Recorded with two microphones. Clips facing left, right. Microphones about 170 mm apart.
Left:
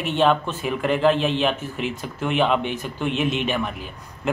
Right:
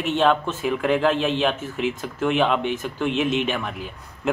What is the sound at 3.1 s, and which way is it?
Speech, 55° left (ahead or behind).